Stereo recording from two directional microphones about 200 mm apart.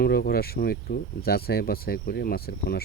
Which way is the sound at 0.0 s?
50° left (ahead or behind).